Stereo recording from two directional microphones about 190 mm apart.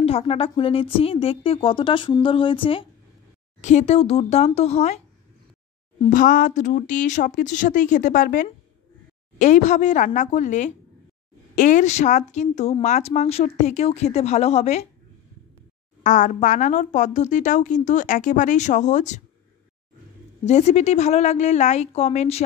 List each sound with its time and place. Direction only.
0.0 s a woman's voice: 30° left (ahead or behind)
16.0 s a woman's voice: 40° left (ahead or behind)
20.4 s a woman's voice: 35° left (ahead or behind)